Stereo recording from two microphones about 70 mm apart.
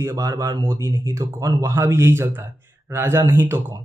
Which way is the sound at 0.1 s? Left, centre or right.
Right.